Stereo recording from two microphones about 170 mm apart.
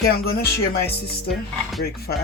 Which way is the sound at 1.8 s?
65° left (ahead or behind).